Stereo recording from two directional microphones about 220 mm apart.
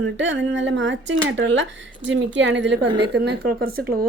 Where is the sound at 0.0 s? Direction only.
60° right (ahead or behind).